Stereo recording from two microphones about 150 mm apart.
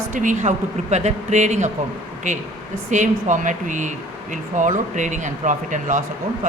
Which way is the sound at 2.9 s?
55° right (ahead or behind).